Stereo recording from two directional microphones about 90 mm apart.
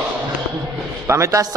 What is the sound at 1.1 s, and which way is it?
Speech, 35° right (ahead or behind).